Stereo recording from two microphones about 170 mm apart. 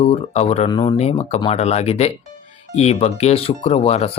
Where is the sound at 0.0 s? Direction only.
35° left (ahead or behind).